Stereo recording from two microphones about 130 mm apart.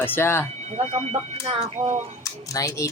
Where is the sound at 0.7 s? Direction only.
55° right (ahead or behind).